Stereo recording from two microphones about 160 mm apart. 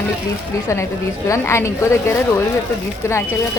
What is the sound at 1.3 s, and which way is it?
Speech, 20° left (ahead or behind).